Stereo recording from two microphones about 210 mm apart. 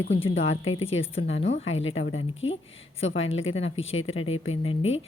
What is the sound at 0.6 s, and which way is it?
Speech, 70° left (ahead or behind).